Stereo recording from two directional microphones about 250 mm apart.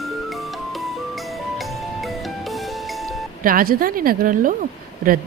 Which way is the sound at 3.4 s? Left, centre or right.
Right.